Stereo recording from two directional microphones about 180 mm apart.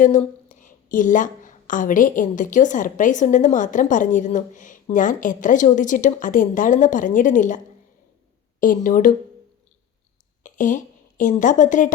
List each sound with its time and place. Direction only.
0.0 s a woman's voice: 45° left (ahead or behind)
8.6 s a woman's voice: 50° left (ahead or behind)
10.4 s a woman's voice: 45° left (ahead or behind)